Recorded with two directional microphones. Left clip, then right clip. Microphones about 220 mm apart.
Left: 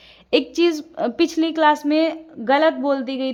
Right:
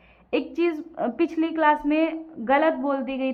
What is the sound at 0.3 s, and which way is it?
A woman's voice, 40° left (ahead or behind).